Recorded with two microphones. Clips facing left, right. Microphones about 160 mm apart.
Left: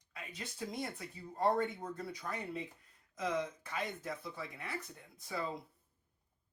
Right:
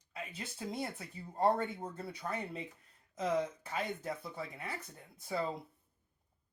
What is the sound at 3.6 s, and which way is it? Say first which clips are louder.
Speech: right 2 dB; 25° right (ahead or behind).